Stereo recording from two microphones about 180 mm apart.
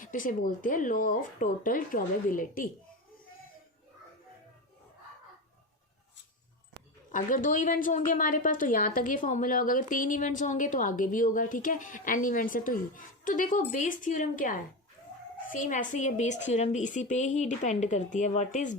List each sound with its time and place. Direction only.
0.0 s a woman's voice: 50° left (ahead or behind)
7.1 s a woman's voice: 45° left (ahead or behind)